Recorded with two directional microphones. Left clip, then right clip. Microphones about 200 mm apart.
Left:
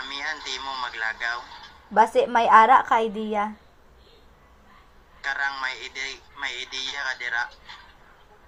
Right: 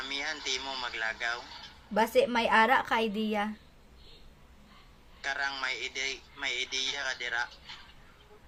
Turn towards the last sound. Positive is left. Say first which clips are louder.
# left 6 dB
turn(degrees=-20)  # may be behind; listen again after turning